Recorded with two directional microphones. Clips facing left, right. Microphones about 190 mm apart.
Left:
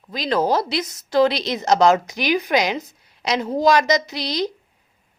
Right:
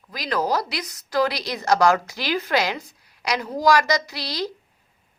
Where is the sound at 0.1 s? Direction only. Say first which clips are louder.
Left 4 dB; 25° left (ahead or behind).